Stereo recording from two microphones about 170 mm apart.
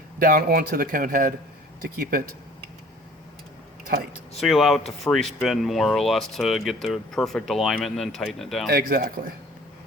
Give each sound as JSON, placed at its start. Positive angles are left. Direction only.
{"t": 0.2, "sound": "speech", "side_deg": -55}
{"t": 3.9, "sound": "speech", "side_deg": -60}
{"t": 4.4, "sound": "speech", "side_deg": 0}
{"t": 8.7, "sound": "speech", "side_deg": -60}